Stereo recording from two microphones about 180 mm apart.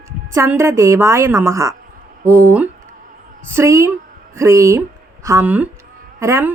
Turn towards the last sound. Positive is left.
turn(degrees=-15)  # may be behind; listen again after turning